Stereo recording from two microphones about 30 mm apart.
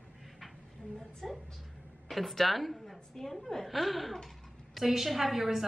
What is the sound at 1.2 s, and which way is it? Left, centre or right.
A woman's voice, centre.